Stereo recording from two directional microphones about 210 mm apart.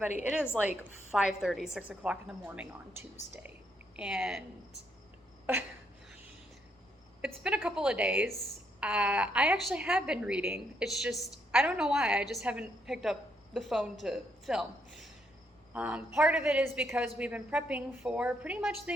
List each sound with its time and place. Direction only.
1.1 s a woman's voice: centre (ahead or behind)
3.9 s a woman's voice: 5° right (ahead or behind)
5.5 s a sound: 10° right (ahead or behind)
7.2 s a woman's voice: 5° right (ahead or behind)